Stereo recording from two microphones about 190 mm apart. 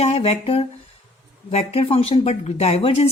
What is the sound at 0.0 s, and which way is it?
Speech, 30° left (ahead or behind).